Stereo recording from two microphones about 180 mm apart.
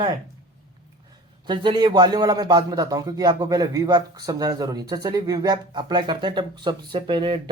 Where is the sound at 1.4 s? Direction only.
25° right (ahead or behind).